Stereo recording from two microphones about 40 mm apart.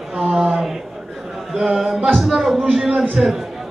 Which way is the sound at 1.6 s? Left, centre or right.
Centre.